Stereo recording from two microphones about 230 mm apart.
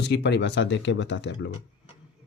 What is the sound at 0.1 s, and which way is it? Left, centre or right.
Speech, left.